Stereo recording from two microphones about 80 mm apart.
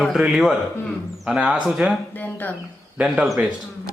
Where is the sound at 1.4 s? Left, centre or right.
Centre.